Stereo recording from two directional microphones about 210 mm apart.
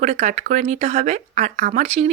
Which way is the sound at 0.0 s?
35° right (ahead or behind).